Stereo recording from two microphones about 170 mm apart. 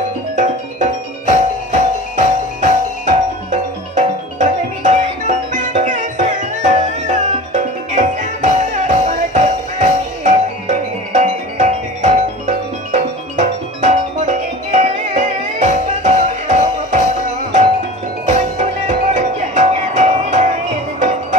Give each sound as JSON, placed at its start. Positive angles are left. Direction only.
{"t": 0.4, "sound": "music", "side_deg": -45}
{"t": 18.2, "sound": "music", "side_deg": -45}